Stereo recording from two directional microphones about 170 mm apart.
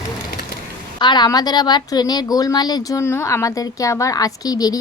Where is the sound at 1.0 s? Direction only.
25° left (ahead or behind).